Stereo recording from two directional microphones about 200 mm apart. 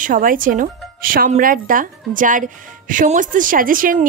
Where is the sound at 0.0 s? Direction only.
40° right (ahead or behind).